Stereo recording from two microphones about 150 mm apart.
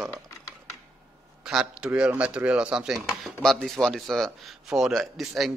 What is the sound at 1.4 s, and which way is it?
Speech, 5° right (ahead or behind).